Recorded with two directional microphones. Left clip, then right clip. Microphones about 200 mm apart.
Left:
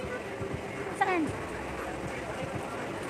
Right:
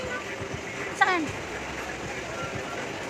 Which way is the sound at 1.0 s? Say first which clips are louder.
Right 6 dB; 10° left (ahead or behind).